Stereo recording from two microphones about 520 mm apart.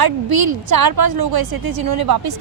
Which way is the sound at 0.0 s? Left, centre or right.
Right.